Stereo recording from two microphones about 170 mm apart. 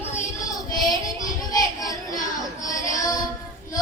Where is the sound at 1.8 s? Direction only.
20° left (ahead or behind).